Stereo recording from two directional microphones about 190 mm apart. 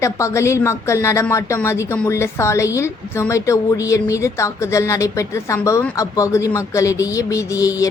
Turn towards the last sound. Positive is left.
turn(degrees=15)  # may be behind; listen again after turning